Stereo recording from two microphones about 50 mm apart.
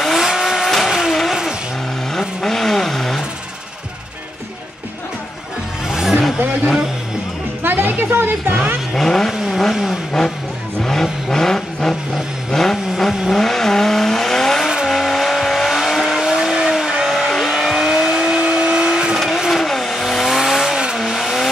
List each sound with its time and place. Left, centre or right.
0.0 s vehicle: centre
2.1 s vehicle: centre
5.9 s vehicle: centre
6.4 s vehicle: right
7.6 s music: right
7.9 s a woman's voice: right
8.9 s speech: centre
9.3 s vehicle: centre
10.8 s vehicle: centre
19.1 s vehicle: centre